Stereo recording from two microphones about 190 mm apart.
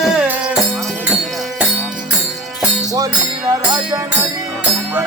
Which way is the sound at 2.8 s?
20° right (ahead or behind).